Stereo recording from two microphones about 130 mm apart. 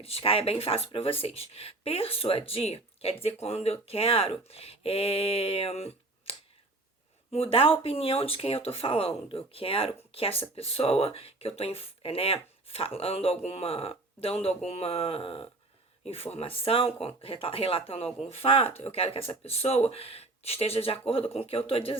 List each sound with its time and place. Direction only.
0.0 s speech: 45° left (ahead or behind)